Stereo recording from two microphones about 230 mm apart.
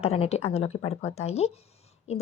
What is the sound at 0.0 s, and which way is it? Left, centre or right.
Speech, left.